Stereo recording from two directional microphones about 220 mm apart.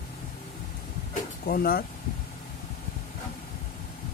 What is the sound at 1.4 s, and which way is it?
Speech, 40° left (ahead or behind).